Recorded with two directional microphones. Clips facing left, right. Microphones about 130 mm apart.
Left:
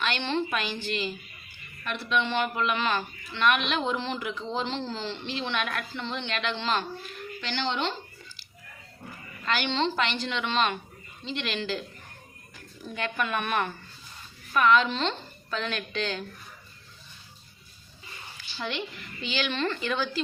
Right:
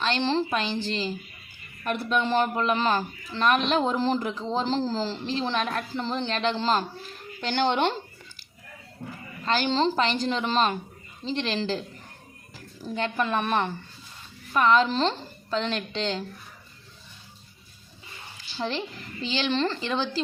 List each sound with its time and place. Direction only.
0.0 s speech: 30° right (ahead or behind)
1.8 s speech: 45° right (ahead or behind)
7.4 s speech: 50° right (ahead or behind)
9.4 s a woman's voice: 35° right (ahead or behind)
18.6 s speech: 35° right (ahead or behind)